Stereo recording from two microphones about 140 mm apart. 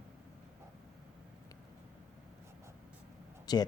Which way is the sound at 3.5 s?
30° left (ahead or behind).